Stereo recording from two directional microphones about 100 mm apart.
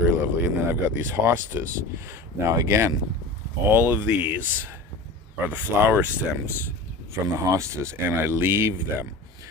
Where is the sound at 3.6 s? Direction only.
20° right (ahead or behind).